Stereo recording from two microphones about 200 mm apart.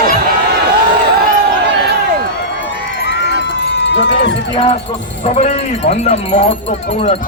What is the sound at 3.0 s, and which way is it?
Run, 60° left (ahead or behind).